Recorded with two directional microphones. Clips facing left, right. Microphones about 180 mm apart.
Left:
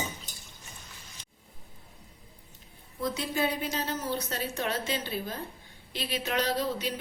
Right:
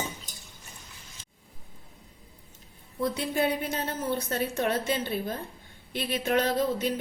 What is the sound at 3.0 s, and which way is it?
A woman's voice, 55° right (ahead or behind).